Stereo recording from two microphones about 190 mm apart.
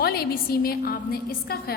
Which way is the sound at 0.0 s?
55° left (ahead or behind).